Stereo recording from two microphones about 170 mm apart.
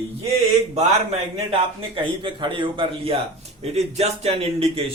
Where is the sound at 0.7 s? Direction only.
35° right (ahead or behind).